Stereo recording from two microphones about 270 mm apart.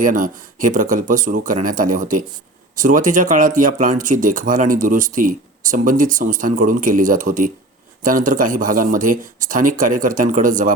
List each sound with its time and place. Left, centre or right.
0.0 s speech: right